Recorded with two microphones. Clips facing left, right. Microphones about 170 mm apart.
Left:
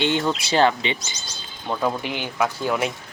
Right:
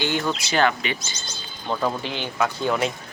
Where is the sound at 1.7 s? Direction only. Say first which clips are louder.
Left 1 dB; 15° left (ahead or behind).